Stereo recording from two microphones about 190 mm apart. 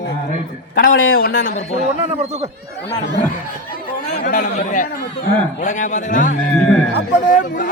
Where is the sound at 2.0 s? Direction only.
35° right (ahead or behind).